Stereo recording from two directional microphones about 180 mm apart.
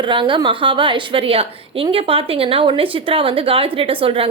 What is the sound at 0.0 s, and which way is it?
A woman's voice, 25° right (ahead or behind).